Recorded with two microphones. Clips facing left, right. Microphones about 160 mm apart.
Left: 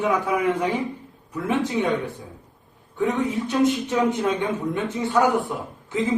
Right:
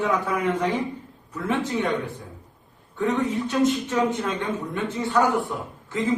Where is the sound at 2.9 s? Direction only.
15° left (ahead or behind).